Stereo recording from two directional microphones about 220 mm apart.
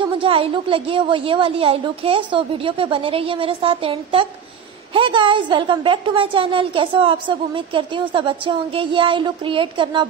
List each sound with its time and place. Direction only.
0.2 s a woman's voice: 25° right (ahead or behind)